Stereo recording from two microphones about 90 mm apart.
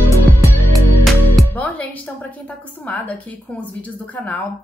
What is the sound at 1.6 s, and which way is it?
Music, 15° left (ahead or behind).